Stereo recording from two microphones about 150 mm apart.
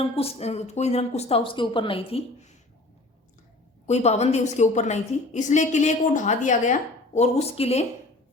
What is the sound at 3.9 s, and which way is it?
A woman's voice, 45° left (ahead or behind).